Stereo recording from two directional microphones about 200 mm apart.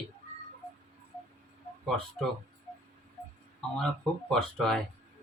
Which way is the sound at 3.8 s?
Centre (ahead or behind).